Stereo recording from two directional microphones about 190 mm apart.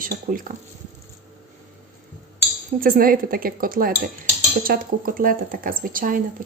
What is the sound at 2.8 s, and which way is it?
Speech, 50° right (ahead or behind).